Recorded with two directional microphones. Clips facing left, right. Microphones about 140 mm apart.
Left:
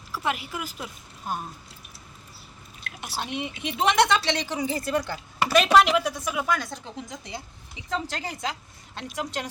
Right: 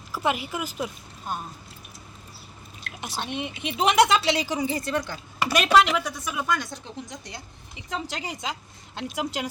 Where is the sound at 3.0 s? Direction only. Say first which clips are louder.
Even; 5° left (ahead or behind).